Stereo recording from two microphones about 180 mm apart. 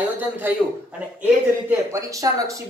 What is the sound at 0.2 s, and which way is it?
Speech, 10° right (ahead or behind).